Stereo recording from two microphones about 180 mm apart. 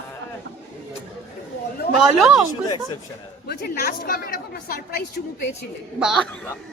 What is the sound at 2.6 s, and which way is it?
Speech, 20° left (ahead or behind).